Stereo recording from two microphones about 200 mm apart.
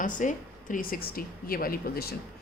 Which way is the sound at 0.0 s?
40° left (ahead or behind).